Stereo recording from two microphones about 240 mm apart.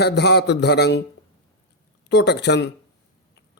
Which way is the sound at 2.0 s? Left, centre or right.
Left.